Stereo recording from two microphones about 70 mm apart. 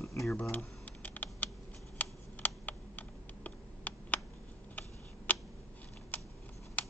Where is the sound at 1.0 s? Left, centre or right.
Left.